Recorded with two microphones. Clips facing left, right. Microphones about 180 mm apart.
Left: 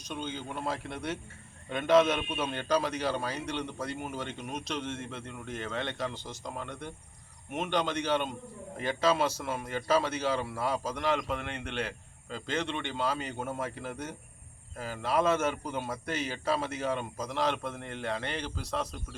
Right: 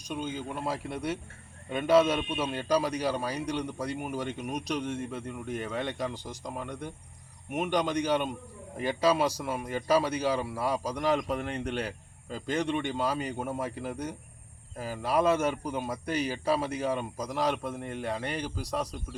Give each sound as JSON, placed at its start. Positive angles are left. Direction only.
{"t": 0.1, "sound": "a man's voice", "side_deg": -10}
{"t": 11.3, "sound": "speech", "side_deg": -40}
{"t": 12.5, "sound": "a man's voice", "side_deg": -15}